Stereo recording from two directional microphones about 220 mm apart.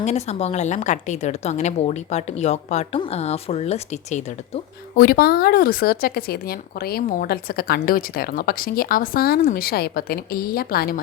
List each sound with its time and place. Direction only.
0.0 s a woman's voice: 30° left (ahead or behind)
4.9 s speech: 40° left (ahead or behind)